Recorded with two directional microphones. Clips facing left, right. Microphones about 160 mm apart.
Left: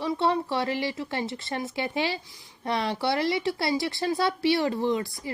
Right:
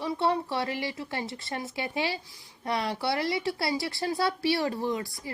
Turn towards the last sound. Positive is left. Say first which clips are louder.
# left 4 dB
turn(degrees=25)  # may be behind; listen again after turning